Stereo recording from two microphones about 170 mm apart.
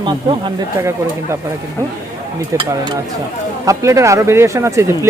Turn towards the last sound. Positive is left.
turn(degrees=-15)  # may be behind; listen again after turning